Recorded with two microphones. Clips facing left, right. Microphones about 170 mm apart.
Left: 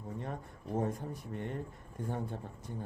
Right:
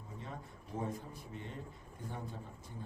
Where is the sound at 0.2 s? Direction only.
55° left (ahead or behind).